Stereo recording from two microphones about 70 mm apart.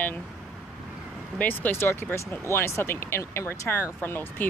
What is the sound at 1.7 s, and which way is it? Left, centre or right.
Speech, left.